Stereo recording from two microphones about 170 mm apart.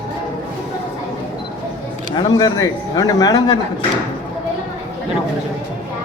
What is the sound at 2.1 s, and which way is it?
Speech, 25° left (ahead or behind).